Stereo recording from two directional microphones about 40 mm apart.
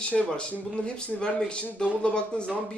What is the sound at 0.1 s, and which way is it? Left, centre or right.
Speech, left.